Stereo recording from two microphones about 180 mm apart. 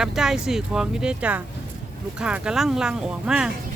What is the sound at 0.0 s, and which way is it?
Speech, 5° right (ahead or behind).